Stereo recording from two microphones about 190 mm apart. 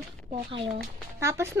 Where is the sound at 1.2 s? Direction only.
15° right (ahead or behind).